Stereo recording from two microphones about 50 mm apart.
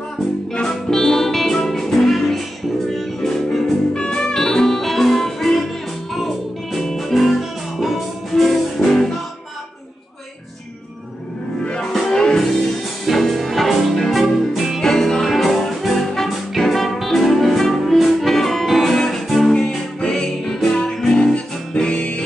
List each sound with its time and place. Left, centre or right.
0.5 s music: centre
3.9 s music: centre
11.6 s music: centre
13.0 s music: centre
14.8 s music: centre
19.5 s music: centre